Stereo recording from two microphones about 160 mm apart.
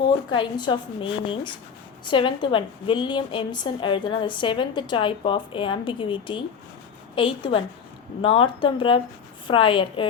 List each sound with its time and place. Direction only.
0.3 s a woman's voice: 30° left (ahead or behind)